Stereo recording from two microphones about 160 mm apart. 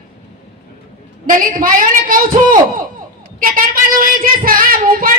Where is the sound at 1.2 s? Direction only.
60° right (ahead or behind).